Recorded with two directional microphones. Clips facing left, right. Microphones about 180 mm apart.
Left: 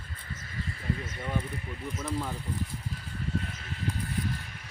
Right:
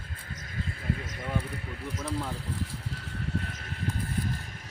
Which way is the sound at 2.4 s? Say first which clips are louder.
Even; 70° right (ahead or behind).